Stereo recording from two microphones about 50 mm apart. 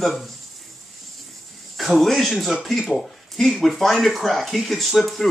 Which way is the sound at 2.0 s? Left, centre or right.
Centre.